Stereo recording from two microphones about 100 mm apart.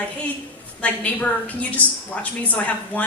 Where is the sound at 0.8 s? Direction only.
15° left (ahead or behind).